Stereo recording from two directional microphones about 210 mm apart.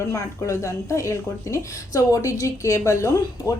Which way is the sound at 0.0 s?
15° left (ahead or behind).